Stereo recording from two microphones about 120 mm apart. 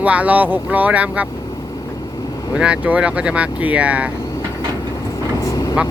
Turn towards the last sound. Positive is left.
turn(degrees=30)  # may be behind; listen again after turning